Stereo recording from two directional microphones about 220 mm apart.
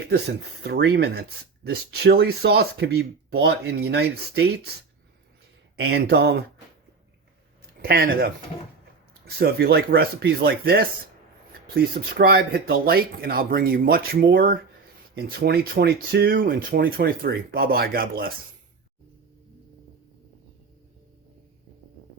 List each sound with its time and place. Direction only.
0.6 s speech: 50° right (ahead or behind)
5.8 s speech: 50° right (ahead or behind)
7.8 s speech: 45° right (ahead or behind)